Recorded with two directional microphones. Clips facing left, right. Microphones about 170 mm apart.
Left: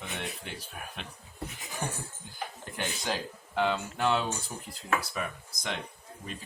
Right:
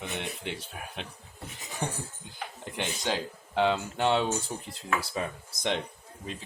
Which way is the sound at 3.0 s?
25° right (ahead or behind).